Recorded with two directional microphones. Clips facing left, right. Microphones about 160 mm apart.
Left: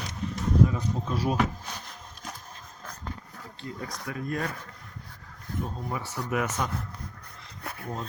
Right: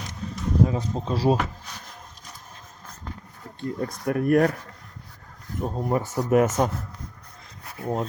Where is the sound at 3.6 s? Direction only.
50° right (ahead or behind).